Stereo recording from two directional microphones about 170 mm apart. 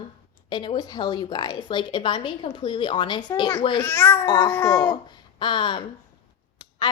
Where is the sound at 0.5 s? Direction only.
25° left (ahead or behind).